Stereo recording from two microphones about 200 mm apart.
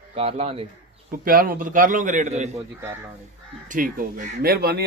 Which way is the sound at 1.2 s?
45° right (ahead or behind).